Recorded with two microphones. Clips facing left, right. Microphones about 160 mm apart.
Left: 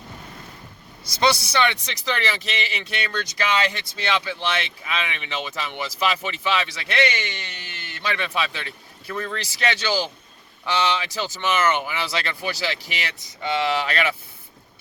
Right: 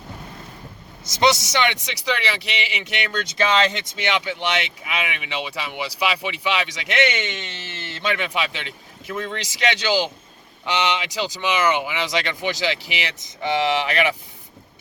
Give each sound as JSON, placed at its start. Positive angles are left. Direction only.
{"t": 1.0, "sound": "speech", "side_deg": -20}